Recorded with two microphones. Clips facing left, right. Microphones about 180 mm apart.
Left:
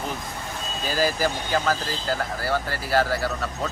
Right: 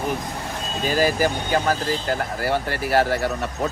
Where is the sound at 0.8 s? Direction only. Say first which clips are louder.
Right 4 dB; 15° right (ahead or behind).